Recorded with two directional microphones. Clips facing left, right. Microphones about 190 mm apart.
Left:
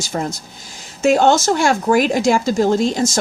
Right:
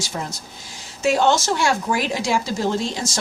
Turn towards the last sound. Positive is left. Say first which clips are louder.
# left 7 dB
turn(degrees=45)  # may be behind; listen again after turning